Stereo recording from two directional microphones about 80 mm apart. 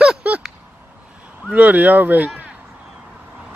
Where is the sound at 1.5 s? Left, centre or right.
Centre.